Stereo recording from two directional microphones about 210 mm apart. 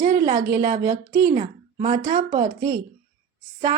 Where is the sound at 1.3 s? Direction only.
30° right (ahead or behind).